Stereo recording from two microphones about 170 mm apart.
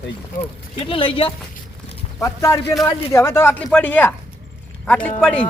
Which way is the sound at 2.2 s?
15° left (ahead or behind).